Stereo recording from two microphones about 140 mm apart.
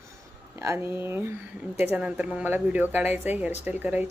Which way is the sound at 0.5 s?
20° right (ahead or behind).